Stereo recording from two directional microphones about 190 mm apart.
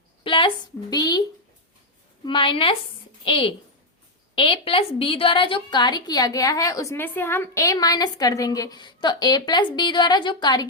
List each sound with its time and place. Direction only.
0.3 s a woman's voice: 25° left (ahead or behind)
2.2 s a woman's voice: 25° left (ahead or behind)